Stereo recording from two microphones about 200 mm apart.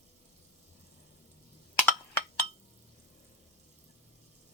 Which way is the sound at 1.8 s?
10° left (ahead or behind).